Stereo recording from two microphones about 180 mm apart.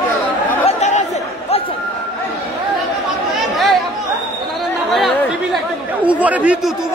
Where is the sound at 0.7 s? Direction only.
40° left (ahead or behind).